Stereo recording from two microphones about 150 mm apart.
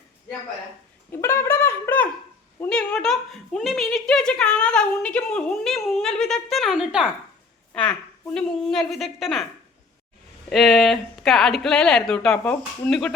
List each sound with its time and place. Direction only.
1.1 s a sound: 15° left (ahead or behind)
2.6 s a woman's voice: 5° left (ahead or behind)
8.3 s a woman's voice: 5° left (ahead or behind)
10.5 s a woman's voice: centre (ahead or behind)